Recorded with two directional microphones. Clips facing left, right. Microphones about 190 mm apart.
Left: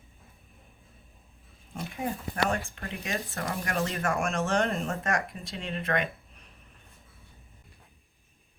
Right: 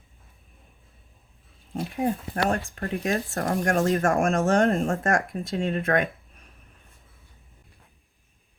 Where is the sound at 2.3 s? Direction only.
40° right (ahead or behind).